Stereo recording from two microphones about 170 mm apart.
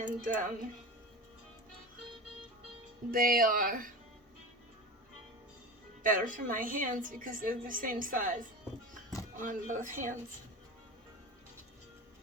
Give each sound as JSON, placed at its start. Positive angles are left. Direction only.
{"t": 0.0, "sound": "speech", "side_deg": -50}
{"t": 3.1, "sound": "speech", "side_deg": -55}
{"t": 6.0, "sound": "a woman's voice", "side_deg": -50}